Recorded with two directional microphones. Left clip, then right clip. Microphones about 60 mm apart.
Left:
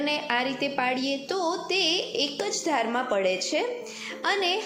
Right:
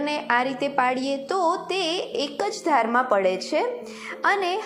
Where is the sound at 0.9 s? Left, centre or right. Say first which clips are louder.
Right 3 dB; left.